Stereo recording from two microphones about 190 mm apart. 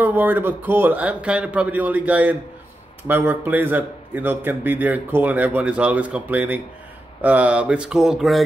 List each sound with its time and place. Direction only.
0.0 s a man's voice: 10° right (ahead or behind)